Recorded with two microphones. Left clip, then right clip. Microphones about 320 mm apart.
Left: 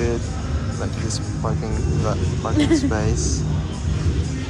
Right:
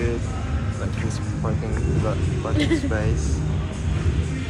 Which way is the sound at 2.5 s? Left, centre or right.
Left.